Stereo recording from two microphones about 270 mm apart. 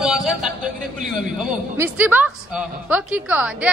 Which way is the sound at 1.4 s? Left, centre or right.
Centre.